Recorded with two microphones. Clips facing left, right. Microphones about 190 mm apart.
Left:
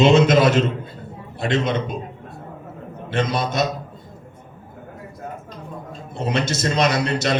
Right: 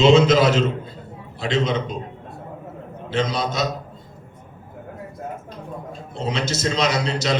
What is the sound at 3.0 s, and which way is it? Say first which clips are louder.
Speech: even; 55° left (ahead or behind).